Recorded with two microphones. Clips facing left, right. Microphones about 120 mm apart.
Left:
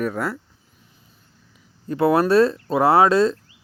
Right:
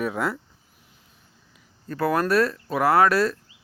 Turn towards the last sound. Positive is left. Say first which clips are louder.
# left 3 dB
turn(degrees=20)  # may be behind; listen again after turning